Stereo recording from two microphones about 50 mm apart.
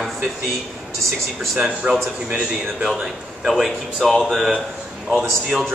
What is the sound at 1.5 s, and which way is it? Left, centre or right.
Speech, centre.